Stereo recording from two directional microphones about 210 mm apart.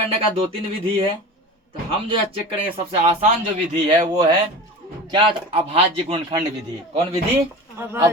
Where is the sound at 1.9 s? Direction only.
25° right (ahead or behind).